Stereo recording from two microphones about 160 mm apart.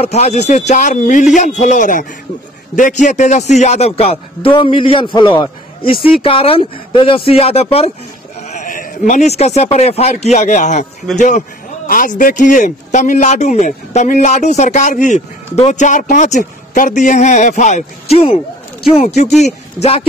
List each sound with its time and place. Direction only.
0.0 s a man's voice: 40° left (ahead or behind)
8.5 s a man's voice: 55° left (ahead or behind); by 18.4 s 40° left (ahead or behind)
19.4 s a man's voice: 40° left (ahead or behind)